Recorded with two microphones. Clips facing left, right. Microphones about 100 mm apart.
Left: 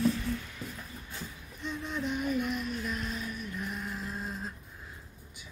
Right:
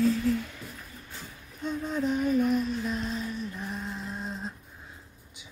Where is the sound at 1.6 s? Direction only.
40° right (ahead or behind); by 4.5 s 25° right (ahead or behind).